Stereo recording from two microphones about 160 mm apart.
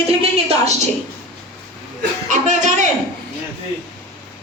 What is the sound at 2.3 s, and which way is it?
Speech, 50° right (ahead or behind).